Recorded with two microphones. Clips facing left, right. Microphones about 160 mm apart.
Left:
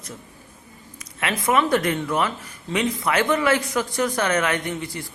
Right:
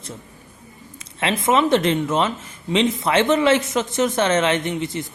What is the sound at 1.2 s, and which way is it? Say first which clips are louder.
A woman's voice: right 3 dB; 25° right (ahead or behind).